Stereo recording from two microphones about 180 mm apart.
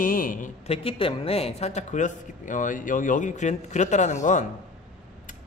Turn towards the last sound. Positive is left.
turn(degrees=45)  # may be behind; listen again after turning